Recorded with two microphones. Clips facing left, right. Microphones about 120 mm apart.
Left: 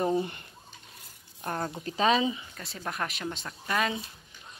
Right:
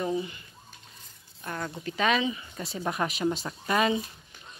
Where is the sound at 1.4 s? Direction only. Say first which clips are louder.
Left 2 dB; 40° left (ahead or behind).